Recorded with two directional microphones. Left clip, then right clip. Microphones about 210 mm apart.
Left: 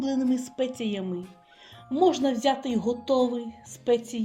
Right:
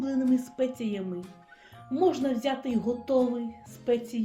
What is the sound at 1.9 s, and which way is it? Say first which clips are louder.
Speech: left 3 dB; 35° left (ahead or behind).